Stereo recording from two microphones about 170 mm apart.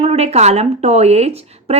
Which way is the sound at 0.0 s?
35° right (ahead or behind).